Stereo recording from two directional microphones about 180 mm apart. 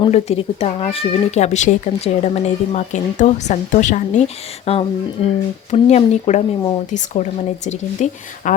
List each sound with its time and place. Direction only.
0.0 s speech: 35° left (ahead or behind)